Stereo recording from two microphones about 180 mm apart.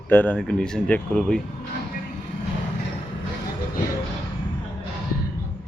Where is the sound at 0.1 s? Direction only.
10° left (ahead or behind).